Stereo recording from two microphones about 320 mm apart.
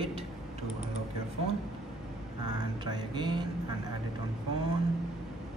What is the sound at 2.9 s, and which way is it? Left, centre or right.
Speech, centre.